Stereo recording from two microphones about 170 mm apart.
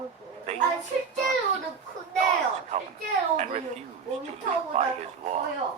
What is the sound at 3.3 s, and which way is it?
Speech, 45° right (ahead or behind).